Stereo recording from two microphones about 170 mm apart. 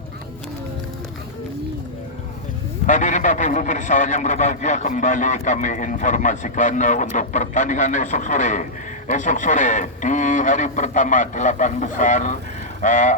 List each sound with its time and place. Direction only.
2.8 s a man's voice: 45° left (ahead or behind)